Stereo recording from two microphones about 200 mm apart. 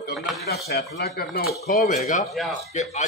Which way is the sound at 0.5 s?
50° left (ahead or behind).